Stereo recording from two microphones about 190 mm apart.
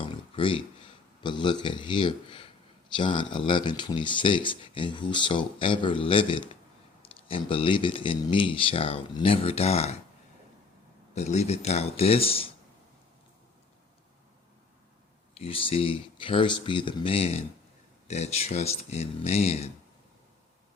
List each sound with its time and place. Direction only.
0.0 s a sound: 25° left (ahead or behind)
1.2 s speech: 25° left (ahead or behind)
11.1 s speech: 35° left (ahead or behind)
15.4 s speech: 30° left (ahead or behind)